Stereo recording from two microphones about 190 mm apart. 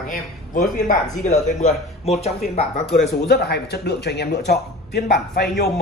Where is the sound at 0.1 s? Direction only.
45° left (ahead or behind).